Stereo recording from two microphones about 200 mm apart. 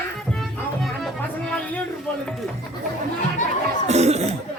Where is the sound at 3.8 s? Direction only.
35° right (ahead or behind).